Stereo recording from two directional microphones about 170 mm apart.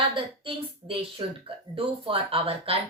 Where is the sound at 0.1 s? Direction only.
30° right (ahead or behind).